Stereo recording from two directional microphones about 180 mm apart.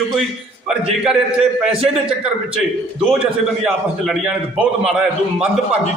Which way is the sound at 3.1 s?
5° right (ahead or behind).